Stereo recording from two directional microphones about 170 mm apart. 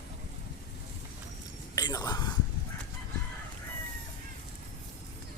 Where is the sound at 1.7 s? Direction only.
20° left (ahead or behind).